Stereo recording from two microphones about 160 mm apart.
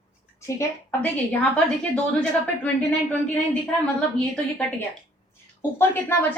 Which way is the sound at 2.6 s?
5° left (ahead or behind).